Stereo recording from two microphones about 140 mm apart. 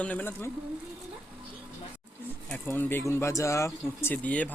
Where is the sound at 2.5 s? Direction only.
15° left (ahead or behind).